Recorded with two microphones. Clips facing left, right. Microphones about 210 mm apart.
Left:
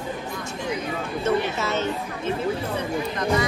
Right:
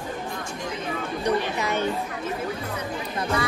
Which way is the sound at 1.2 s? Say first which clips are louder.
Left 2 dB; 15° right (ahead or behind).